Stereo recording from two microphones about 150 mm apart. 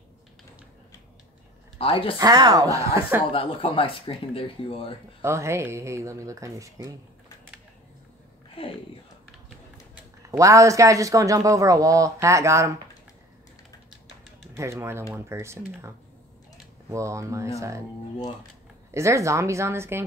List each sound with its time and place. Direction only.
1.8 s speech: 35° left (ahead or behind)
2.1 s speech: 25° right (ahead or behind)
3.3 s speech: 35° left (ahead or behind)
5.2 s speech: 20° right (ahead or behind)
8.6 s speech: 40° left (ahead or behind)
10.3 s speech: 20° right (ahead or behind)
14.6 s speech: 20° right (ahead or behind)
16.9 s speech: 20° right (ahead or behind)
18.9 s speech: 20° right (ahead or behind)